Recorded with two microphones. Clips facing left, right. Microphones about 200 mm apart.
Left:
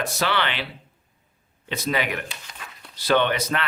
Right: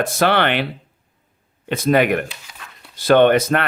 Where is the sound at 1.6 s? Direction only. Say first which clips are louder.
Right 10 dB; 50° right (ahead or behind).